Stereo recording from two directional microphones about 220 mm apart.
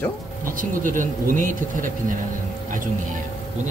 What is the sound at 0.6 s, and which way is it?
A man's voice, 35° right (ahead or behind).